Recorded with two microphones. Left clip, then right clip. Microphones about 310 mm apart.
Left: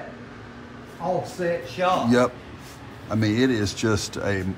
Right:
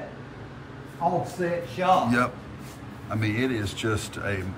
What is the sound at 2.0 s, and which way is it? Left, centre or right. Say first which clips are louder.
Speech: left 4 dB; centre.